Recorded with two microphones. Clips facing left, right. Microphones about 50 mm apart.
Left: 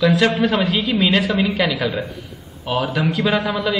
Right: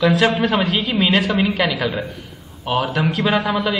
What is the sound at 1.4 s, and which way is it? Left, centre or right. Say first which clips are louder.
A woman's voice: even; centre.